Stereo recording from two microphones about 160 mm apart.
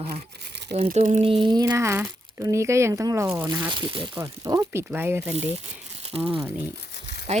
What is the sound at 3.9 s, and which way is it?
Speech, 30° right (ahead or behind).